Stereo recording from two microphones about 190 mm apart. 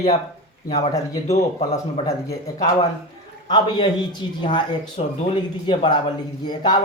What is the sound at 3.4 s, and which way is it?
A man's voice, 20° left (ahead or behind).